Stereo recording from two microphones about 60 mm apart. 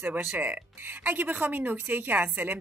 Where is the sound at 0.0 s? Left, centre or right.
Right.